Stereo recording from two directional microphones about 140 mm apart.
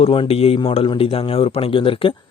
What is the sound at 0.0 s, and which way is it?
Speech, 40° left (ahead or behind).